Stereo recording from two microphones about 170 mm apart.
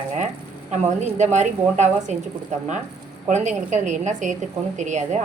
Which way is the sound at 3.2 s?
45° right (ahead or behind).